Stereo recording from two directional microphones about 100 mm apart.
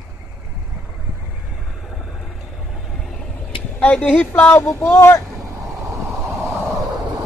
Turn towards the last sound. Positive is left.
turn(degrees=-25)  # may be behind; listen again after turning